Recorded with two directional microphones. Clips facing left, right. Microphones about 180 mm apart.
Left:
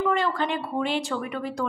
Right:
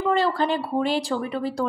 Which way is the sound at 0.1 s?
35° right (ahead or behind).